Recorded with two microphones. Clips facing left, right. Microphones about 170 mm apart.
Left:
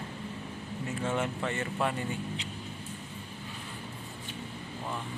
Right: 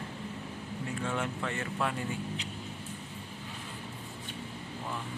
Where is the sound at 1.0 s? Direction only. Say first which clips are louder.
Left 3 dB; 5° left (ahead or behind).